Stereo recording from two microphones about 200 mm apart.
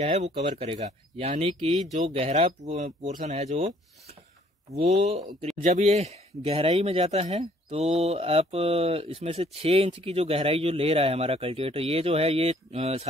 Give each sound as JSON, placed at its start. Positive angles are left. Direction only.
{"t": 0.0, "sound": "speech", "side_deg": -35}